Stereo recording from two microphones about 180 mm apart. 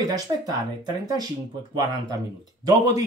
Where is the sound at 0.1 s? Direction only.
20° right (ahead or behind).